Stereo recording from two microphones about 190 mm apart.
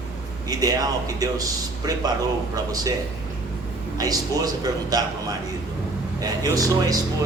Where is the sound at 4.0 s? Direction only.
20° right (ahead or behind).